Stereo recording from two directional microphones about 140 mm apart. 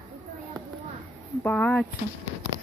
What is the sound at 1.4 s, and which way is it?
Speech, 10° left (ahead or behind).